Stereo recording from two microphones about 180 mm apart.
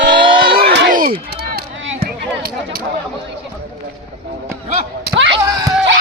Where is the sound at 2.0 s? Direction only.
55° right (ahead or behind).